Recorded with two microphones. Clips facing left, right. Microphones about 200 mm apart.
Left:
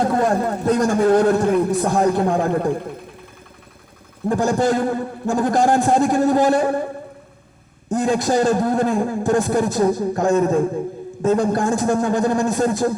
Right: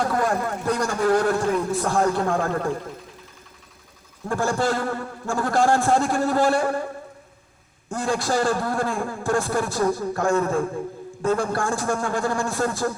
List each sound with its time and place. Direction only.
0.0 s a man's voice: 25° left (ahead or behind)
1.4 s a man's voice: 60° left (ahead or behind)
1.7 s a man's voice: 20° left (ahead or behind)
4.3 s a man's voice: 20° left (ahead or behind)
7.9 s a man's voice: 20° left (ahead or behind)